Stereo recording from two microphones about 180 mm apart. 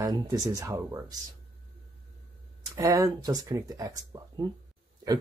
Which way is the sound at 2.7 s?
20° right (ahead or behind).